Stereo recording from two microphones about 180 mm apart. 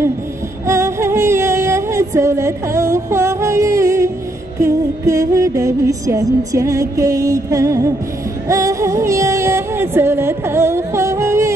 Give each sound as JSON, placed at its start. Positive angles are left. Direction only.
{"t": 0.7, "sound": "music", "side_deg": -15}